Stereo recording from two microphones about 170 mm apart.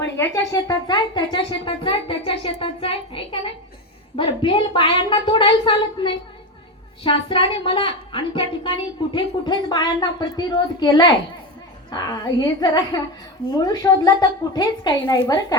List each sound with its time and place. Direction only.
0.2 s a woman's voice: 20° left (ahead or behind)